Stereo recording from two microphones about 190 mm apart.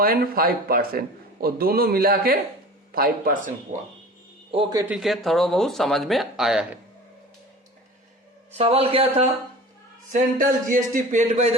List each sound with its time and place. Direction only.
0.0 s a man's voice: 50° right (ahead or behind)
4.7 s speech: 15° right (ahead or behind)
4.9 s speech: centre (ahead or behind)
8.5 s speech: 30° right (ahead or behind)
10.1 s a man's voice: 45° right (ahead or behind)